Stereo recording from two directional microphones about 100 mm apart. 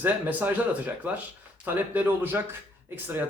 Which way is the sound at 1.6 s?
20° right (ahead or behind).